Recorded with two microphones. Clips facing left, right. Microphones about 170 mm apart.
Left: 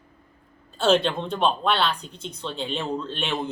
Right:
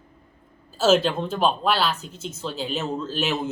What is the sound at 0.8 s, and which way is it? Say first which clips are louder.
Speech: right 2 dB; 5° right (ahead or behind).